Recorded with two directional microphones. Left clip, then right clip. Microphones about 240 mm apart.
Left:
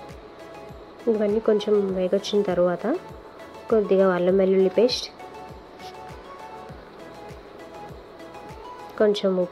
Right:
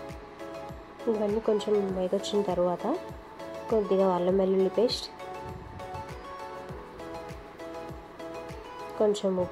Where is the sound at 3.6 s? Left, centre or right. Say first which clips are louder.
Left 6 dB; centre.